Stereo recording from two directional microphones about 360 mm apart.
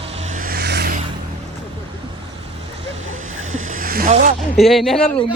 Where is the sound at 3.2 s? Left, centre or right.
Right.